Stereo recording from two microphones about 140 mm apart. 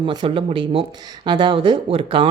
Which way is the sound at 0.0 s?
35° right (ahead or behind).